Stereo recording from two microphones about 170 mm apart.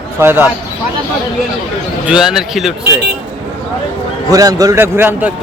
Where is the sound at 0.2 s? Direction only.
10° right (ahead or behind).